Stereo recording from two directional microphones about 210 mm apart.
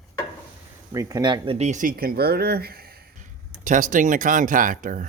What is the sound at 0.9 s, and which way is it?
Speech, 15° right (ahead or behind).